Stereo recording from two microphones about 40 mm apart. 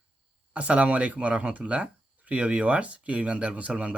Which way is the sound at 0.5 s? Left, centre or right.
Right.